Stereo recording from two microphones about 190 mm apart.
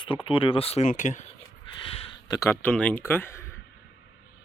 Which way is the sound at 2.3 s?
15° left (ahead or behind).